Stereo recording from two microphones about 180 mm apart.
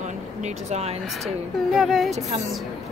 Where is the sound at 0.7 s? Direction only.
35° right (ahead or behind).